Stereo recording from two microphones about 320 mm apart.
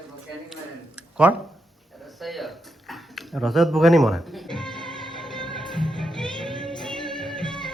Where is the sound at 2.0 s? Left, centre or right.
Centre.